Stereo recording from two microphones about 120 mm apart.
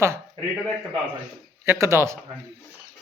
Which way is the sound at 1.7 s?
25° right (ahead or behind).